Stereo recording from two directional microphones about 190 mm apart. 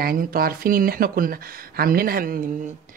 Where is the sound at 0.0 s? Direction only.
50° right (ahead or behind).